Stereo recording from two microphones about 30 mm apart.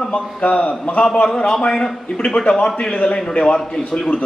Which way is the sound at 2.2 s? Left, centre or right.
Left.